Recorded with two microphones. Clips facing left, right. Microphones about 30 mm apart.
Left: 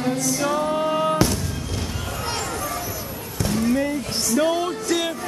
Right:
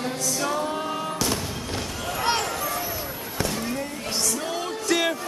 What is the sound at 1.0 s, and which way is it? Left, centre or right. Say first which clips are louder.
Music: left 8 dB; left.